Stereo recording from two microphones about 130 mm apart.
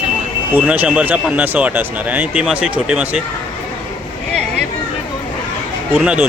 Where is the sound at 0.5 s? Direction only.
15° right (ahead or behind).